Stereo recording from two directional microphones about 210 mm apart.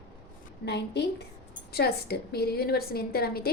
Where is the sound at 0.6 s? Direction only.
55° left (ahead or behind).